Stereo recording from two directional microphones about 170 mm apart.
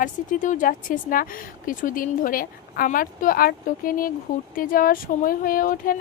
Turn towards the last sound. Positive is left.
turn(degrees=55)  # may be behind; listen again after turning